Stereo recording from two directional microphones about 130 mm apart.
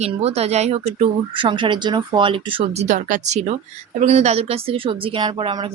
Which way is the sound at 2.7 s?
70° right (ahead or behind).